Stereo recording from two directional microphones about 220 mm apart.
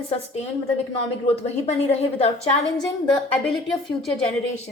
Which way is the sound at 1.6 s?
25° left (ahead or behind).